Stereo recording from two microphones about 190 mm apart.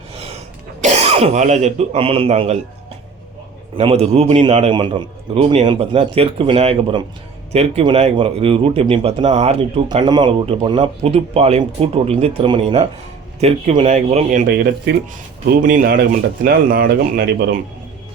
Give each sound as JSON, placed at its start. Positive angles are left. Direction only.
{"t": 0.1, "sound": "throat clearing", "side_deg": -30}
{"t": 0.8, "sound": "speech", "side_deg": -35}
{"t": 3.8, "sound": "speech", "side_deg": -30}
{"t": 14.3, "sound": "speech", "side_deg": -50}